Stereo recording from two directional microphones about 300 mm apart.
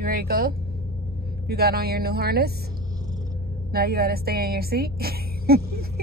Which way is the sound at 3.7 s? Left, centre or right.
Right.